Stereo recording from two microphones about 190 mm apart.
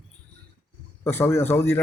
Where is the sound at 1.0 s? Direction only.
10° left (ahead or behind).